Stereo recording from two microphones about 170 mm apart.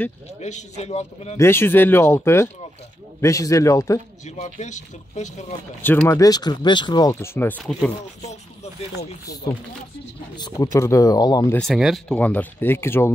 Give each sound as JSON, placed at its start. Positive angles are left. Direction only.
{"t": 0.4, "sound": "a man's voice", "side_deg": 45}
{"t": 1.3, "sound": "speech", "side_deg": 15}
{"t": 4.6, "sound": "speech", "side_deg": 45}
{"t": 5.8, "sound": "speech", "side_deg": 15}
{"t": 10.3, "sound": "speech", "side_deg": 20}
{"t": 11.5, "sound": "speech", "side_deg": 0}